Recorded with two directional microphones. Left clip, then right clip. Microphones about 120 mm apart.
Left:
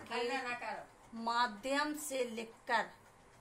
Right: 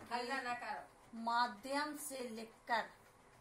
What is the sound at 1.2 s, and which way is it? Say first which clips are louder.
Speech: left 2 dB; 75° left (ahead or behind).